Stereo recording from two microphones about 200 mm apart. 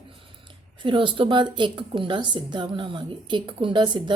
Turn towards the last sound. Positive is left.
turn(degrees=-25)  # may be behind; listen again after turning